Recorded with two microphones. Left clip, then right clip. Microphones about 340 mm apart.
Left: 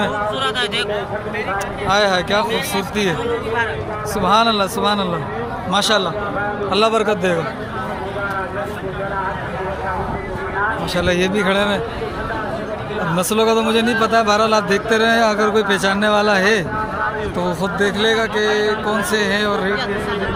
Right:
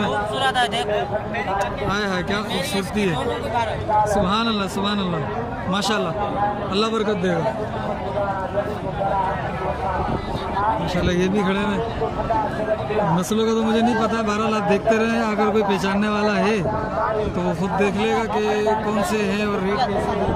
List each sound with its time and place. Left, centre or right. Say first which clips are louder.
0.4 s speech: right 3 dB; right
1.9 s speech: left 8 dB; centre
4.1 s speech: left 6 dB; centre
11.0 s speech: left 7 dB; centre
13.1 s speech: left 5 dB; centre